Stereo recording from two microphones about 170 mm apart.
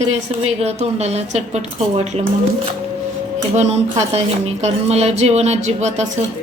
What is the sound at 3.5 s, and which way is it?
A woman's voice, 40° right (ahead or behind).